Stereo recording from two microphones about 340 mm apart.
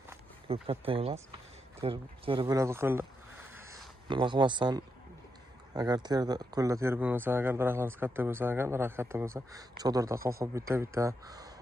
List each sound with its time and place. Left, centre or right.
0.1 s speech: centre
3.5 s a sound: centre
5.7 s speech: centre